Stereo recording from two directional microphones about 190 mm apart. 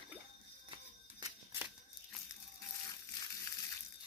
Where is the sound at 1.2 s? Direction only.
15° right (ahead or behind).